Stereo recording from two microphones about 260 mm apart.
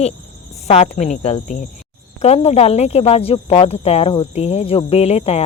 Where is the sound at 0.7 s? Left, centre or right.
Left.